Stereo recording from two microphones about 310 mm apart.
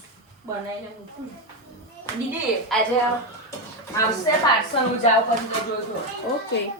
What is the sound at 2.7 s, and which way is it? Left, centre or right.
Speech, centre.